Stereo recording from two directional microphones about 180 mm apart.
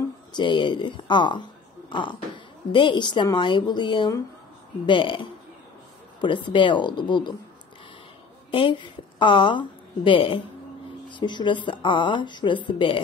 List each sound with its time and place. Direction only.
0.3 s a woman's voice: 25° left (ahead or behind)
8.5 s a woman's voice: 30° left (ahead or behind)